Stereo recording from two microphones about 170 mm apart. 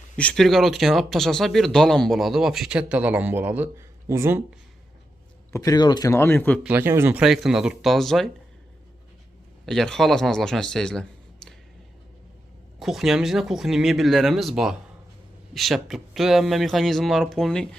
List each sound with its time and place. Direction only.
0.2 s speech: 5° left (ahead or behind); by 4.4 s 15° right (ahead or behind)
5.5 s speech: 20° left (ahead or behind)
6.6 s speech: 10° right (ahead or behind)
9.6 s speech: centre (ahead or behind)
12.8 s speech: centre (ahead or behind)